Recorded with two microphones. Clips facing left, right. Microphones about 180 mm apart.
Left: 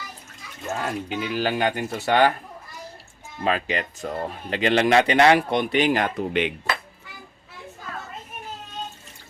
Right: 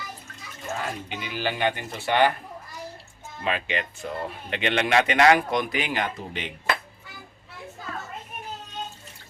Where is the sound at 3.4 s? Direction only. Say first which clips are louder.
Left 4 dB; 40° left (ahead or behind).